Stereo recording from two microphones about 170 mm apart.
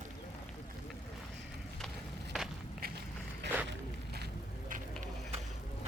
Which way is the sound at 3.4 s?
90° right.